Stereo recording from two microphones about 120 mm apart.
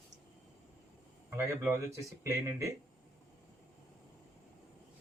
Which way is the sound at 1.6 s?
20° right (ahead or behind).